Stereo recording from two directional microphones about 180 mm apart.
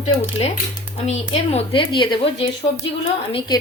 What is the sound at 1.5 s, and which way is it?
Speech, 30° left (ahead or behind).